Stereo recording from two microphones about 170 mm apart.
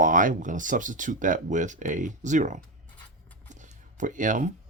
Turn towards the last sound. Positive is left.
turn(degrees=-50)  # may be behind; listen again after turning